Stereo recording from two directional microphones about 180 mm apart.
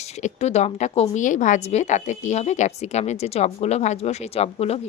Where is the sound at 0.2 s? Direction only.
40° left (ahead or behind).